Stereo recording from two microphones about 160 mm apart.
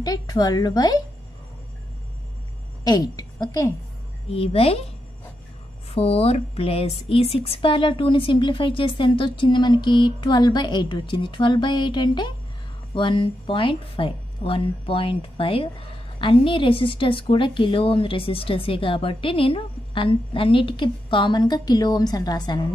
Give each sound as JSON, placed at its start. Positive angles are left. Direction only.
{"t": 0.0, "sound": "a woman's voice", "side_deg": 25}
{"t": 2.8, "sound": "a woman's voice", "side_deg": 25}
{"t": 4.3, "sound": "a woman's voice", "side_deg": 40}